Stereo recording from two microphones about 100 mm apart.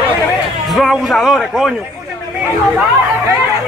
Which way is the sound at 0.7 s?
Centre (ahead or behind).